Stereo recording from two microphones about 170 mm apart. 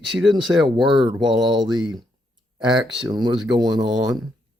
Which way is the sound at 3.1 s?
25° right (ahead or behind).